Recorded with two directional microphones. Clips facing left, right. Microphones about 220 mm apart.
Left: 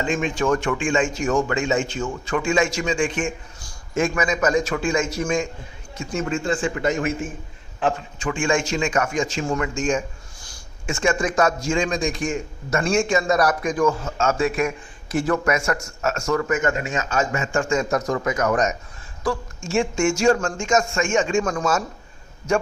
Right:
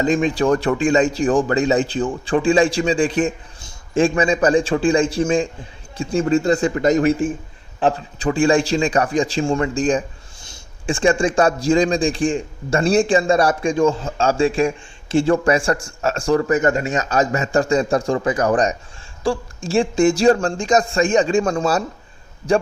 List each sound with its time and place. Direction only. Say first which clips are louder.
0.0 s a man's voice: right 5 dB; 35° right (ahead or behind)